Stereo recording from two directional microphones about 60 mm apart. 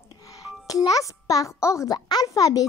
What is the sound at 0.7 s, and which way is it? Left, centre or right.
A child's voice, left.